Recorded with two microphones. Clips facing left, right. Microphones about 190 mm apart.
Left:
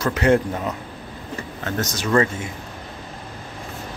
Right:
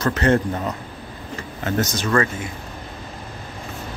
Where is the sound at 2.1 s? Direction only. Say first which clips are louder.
Left 2 dB; 20° left (ahead or behind).